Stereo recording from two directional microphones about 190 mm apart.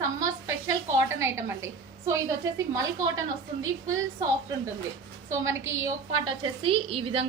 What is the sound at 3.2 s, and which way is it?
Speech, 90° right.